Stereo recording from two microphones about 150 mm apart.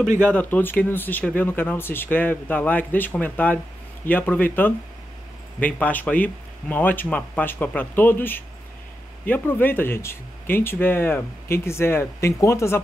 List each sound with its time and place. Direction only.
0.2 s speech: 10° left (ahead or behind)